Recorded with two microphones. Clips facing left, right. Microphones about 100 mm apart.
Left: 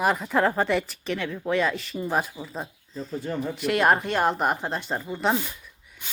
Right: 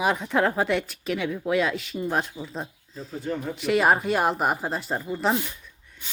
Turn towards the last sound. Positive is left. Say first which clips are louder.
# even
turn(degrees=0)  # may be behind; listen again after turning